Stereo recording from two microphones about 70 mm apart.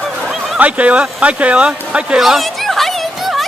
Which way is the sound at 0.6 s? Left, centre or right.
Centre.